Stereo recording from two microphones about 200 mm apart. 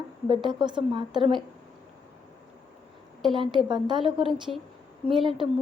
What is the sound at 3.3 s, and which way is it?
Speech, 25° right (ahead or behind).